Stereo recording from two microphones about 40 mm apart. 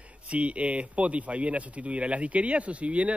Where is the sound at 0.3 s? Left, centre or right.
Right.